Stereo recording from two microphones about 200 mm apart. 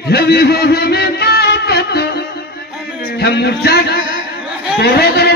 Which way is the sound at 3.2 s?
55° left (ahead or behind).